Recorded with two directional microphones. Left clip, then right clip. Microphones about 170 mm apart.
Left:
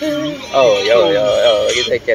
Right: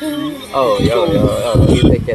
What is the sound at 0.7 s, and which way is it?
Speech, 10° right (ahead or behind).